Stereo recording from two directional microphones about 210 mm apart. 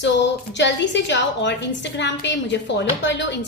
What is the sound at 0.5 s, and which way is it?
A woman's voice, 60° left (ahead or behind).